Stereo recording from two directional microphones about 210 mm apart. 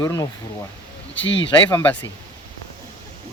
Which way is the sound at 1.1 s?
60° left (ahead or behind).